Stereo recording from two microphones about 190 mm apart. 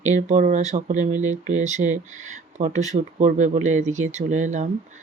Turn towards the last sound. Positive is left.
turn(degrees=-40)  # may be behind; listen again after turning